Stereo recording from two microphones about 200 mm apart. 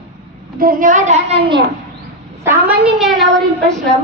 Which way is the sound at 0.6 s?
45° right (ahead or behind).